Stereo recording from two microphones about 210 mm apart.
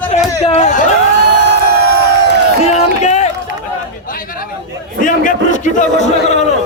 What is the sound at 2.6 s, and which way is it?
Crowd, 30° left (ahead or behind).